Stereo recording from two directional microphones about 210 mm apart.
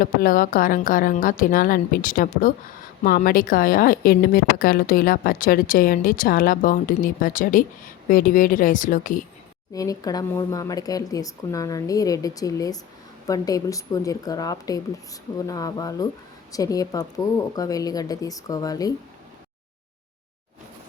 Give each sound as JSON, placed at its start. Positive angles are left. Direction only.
{"t": 0.0, "sound": "a woman's voice", "side_deg": 45}
{"t": 9.7, "sound": "speech", "side_deg": 15}